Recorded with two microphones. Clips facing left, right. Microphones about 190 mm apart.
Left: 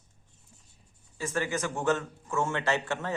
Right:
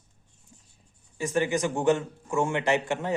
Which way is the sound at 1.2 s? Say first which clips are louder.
Right 5 dB; 15° right (ahead or behind).